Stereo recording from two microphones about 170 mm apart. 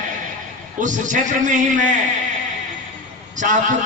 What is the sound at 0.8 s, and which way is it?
A man's voice, 50° right (ahead or behind).